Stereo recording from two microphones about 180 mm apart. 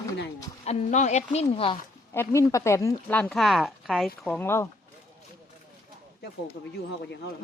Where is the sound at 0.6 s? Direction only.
40° left (ahead or behind).